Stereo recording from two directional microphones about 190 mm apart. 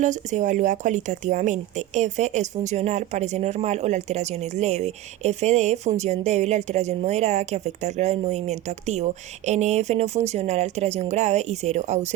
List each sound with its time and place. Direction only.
0.0 s speech: 40° right (ahead or behind)